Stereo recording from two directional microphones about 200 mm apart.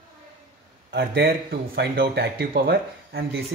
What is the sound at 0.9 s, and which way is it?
Speech, 55° right (ahead or behind).